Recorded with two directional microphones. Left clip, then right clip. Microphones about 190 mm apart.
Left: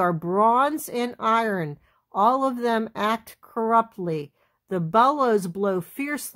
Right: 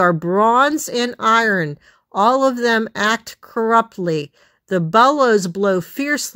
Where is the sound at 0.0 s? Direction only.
25° right (ahead or behind).